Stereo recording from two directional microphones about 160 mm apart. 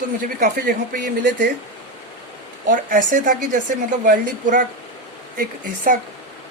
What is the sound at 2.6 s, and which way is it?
Speech, 55° right (ahead or behind).